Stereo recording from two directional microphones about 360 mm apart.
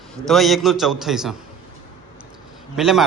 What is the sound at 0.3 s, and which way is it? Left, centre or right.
A man's voice, centre.